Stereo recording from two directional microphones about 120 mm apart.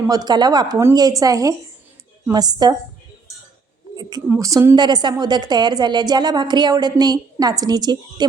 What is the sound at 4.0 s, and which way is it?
Speech, 30° right (ahead or behind).